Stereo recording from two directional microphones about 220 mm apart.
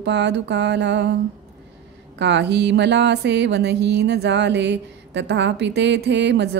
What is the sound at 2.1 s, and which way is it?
Mantra, 50° right (ahead or behind).